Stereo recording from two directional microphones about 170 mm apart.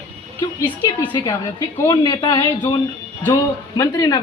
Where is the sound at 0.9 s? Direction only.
25° left (ahead or behind).